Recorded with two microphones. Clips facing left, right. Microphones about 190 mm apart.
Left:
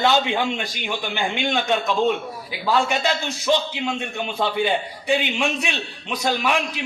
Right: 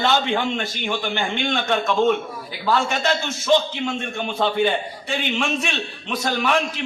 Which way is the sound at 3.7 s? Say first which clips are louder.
Right 1 dB; 15° left (ahead or behind).